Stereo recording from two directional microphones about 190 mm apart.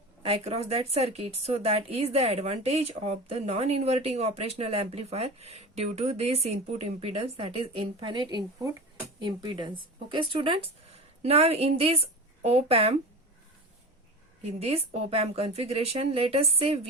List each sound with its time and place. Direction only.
0.2 s speech: 30° right (ahead or behind)
14.4 s speech: 30° right (ahead or behind)